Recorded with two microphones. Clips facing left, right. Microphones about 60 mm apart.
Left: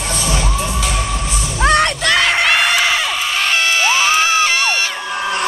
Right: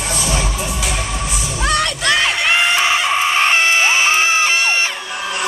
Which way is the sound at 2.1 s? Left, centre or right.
Left.